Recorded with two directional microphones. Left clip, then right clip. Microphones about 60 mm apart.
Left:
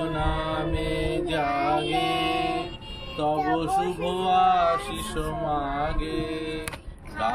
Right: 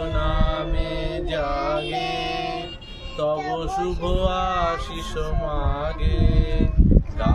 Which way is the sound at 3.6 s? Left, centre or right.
Right.